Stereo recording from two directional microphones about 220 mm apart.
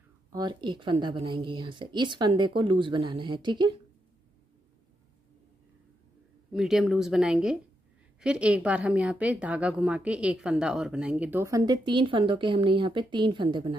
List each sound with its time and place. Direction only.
0.3 s a woman's voice: 20° right (ahead or behind)
6.5 s a woman's voice: centre (ahead or behind); by 13.7 s 20° right (ahead or behind)